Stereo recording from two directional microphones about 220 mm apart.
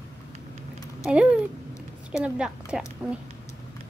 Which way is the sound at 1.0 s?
5° right (ahead or behind).